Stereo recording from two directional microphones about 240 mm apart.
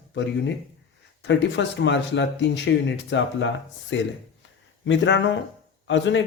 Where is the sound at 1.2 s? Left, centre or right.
Left.